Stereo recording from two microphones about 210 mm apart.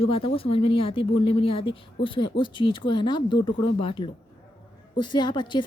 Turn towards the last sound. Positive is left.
turn(degrees=20)  # may be behind; listen again after turning